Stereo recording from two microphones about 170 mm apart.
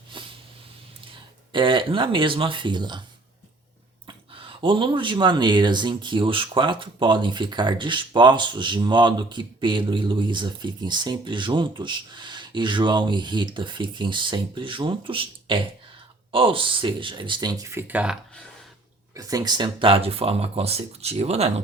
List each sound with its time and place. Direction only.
0.1 s snort: 30° right (ahead or behind)
1.5 s speech: 30° right (ahead or behind)
4.0 s speech: 30° right (ahead or behind); by 18.2 s 5° right (ahead or behind)
19.1 s speech: 20° right (ahead or behind); by 21.5 s 40° right (ahead or behind)